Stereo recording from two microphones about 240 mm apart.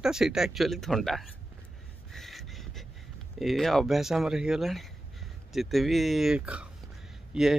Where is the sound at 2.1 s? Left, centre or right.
Centre.